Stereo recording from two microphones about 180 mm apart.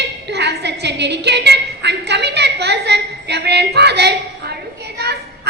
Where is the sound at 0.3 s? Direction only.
70° right (ahead or behind).